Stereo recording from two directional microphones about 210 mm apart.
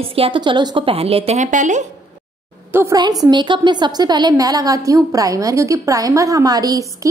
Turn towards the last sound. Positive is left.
turn(degrees=-15)  # may be behind; listen again after turning